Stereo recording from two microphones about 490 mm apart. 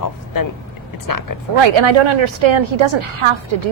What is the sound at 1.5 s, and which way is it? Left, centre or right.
A woman's voice, right.